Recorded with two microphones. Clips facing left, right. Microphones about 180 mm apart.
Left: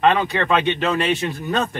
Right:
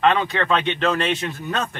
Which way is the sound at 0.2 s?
15° left (ahead or behind).